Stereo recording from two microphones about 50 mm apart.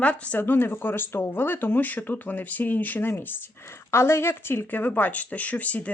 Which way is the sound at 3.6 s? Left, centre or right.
Left.